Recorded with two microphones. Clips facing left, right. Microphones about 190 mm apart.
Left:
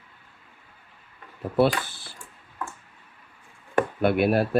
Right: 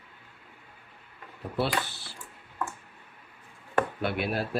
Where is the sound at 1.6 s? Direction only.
50° left (ahead or behind).